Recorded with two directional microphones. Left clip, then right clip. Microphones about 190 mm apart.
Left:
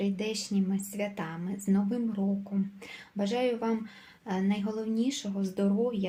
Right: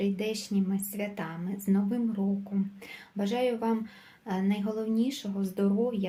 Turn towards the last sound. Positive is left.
turn(degrees=0)  # may be behind; listen again after turning